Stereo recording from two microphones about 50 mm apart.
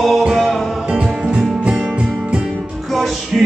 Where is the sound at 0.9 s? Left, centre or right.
Centre.